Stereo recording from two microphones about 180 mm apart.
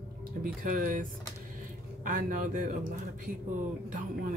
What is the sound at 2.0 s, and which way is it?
Speech, 50° right (ahead or behind).